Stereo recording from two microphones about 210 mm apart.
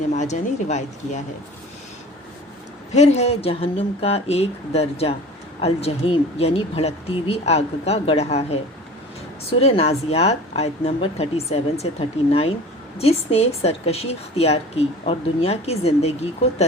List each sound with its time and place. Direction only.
0.1 s speech: 35° left (ahead or behind)
2.9 s speech: 30° left (ahead or behind)
9.6 s speech: 30° left (ahead or behind)